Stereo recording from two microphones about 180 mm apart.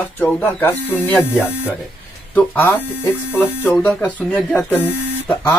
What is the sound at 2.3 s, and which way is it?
Speech, 10° left (ahead or behind).